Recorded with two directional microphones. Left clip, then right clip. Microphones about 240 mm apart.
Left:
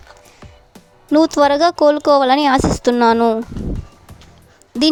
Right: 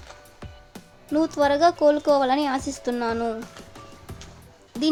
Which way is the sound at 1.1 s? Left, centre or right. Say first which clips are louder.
Left 9 dB; left.